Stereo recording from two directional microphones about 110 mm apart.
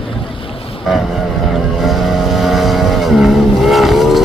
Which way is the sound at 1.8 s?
Centre (ahead or behind).